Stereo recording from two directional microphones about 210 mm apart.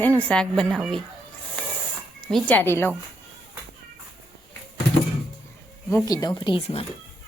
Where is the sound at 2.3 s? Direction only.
5° left (ahead or behind).